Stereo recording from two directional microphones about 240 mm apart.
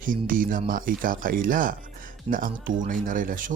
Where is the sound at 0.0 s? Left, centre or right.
Right.